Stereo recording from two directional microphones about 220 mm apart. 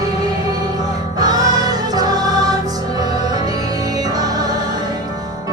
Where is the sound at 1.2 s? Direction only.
15° right (ahead or behind).